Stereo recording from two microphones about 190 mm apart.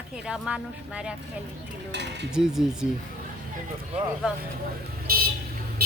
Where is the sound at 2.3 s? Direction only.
5° right (ahead or behind).